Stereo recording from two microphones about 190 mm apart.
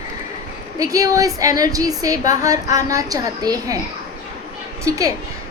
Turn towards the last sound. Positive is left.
turn(degrees=-15)  # may be behind; listen again after turning